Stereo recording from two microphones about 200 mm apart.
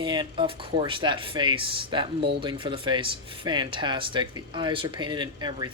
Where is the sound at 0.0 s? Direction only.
25° right (ahead or behind).